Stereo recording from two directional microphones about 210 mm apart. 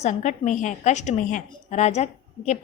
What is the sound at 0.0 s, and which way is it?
A woman's voice, 35° left (ahead or behind).